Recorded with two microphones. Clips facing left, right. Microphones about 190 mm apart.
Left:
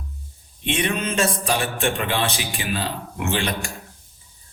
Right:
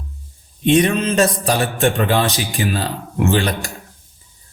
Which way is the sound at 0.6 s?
40° right (ahead or behind).